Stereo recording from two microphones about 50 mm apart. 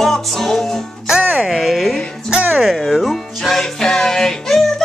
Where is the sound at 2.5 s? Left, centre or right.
Centre.